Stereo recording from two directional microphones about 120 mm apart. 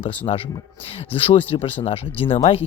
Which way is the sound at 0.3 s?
45° left (ahead or behind).